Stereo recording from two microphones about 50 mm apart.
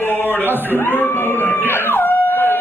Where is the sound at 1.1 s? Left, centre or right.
Left.